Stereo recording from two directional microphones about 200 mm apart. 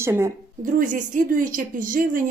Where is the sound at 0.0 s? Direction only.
15° right (ahead or behind).